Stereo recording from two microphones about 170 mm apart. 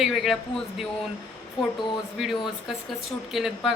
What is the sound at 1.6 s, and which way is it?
Speech, 30° left (ahead or behind).